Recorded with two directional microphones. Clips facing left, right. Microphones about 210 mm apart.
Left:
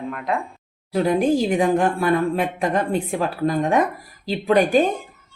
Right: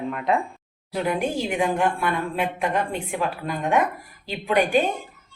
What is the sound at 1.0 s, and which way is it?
A woman's voice, 35° left (ahead or behind).